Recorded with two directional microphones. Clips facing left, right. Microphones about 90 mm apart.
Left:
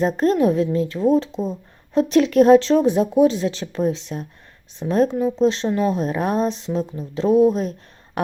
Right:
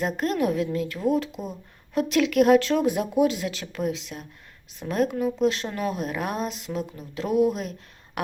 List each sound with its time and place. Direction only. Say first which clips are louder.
0.0 s speech: left 7 dB; 35° left (ahead or behind)